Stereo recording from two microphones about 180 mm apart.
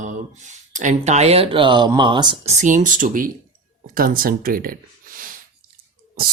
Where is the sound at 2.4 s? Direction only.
40° right (ahead or behind).